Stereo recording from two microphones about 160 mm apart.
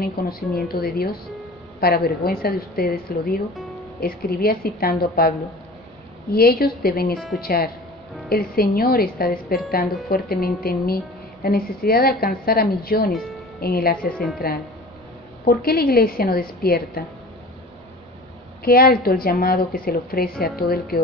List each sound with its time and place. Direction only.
0.0 s a woman's voice: 70° left (ahead or behind)
6.3 s a woman's voice: 75° left (ahead or behind)
18.6 s a woman's voice: 70° left (ahead or behind)